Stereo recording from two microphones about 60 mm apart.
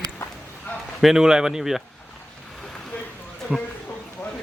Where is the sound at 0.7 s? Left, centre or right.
Left.